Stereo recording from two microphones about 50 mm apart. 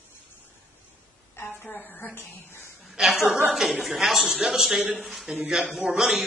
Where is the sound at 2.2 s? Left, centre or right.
Left.